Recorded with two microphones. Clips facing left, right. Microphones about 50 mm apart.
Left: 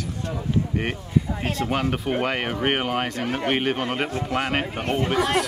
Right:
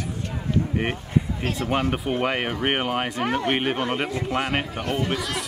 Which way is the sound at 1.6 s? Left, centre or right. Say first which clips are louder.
Right 1 dB; centre.